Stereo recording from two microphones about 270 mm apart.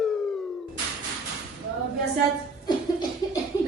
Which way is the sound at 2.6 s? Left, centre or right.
Centre.